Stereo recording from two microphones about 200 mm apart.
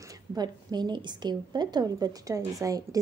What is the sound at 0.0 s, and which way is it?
A woman's voice, 15° right (ahead or behind).